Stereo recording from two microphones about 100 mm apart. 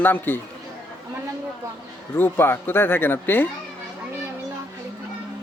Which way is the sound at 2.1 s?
20° left (ahead or behind).